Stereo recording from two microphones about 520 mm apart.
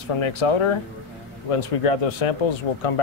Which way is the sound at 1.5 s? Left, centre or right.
Left.